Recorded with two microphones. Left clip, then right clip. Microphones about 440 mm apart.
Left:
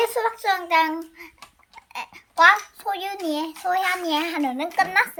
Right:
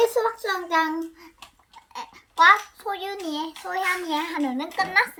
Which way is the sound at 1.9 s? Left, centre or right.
Left.